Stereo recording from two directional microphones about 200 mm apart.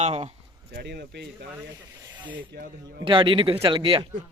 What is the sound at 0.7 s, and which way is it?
Speech, 55° right (ahead or behind).